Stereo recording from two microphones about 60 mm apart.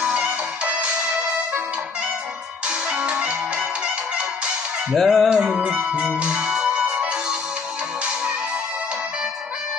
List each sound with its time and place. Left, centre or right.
0.0 s music: centre
2.9 s music: centre
4.9 s music: centre
5.3 s music: centre